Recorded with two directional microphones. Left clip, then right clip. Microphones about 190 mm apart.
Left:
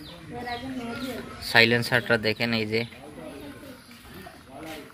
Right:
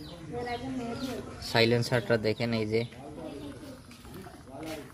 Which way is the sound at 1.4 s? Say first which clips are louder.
Left 6 dB; 10° right (ahead or behind).